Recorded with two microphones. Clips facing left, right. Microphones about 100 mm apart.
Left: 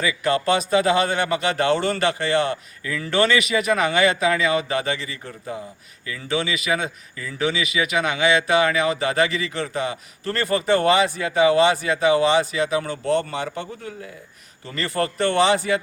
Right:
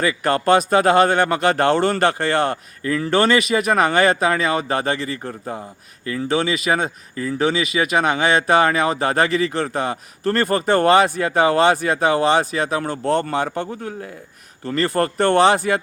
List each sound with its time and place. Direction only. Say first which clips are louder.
0.0 s speech: right 2 dB; 45° right (ahead or behind)